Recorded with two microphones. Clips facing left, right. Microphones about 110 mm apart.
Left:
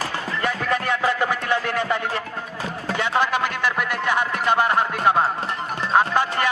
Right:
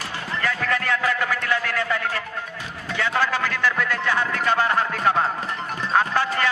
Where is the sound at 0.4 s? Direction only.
20° left (ahead or behind).